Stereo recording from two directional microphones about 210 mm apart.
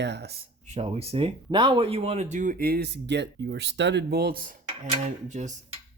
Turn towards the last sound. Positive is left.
turn(degrees=-35)  # may be behind; listen again after turning